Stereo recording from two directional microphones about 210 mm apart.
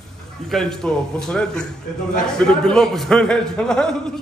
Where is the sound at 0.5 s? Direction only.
Centre (ahead or behind).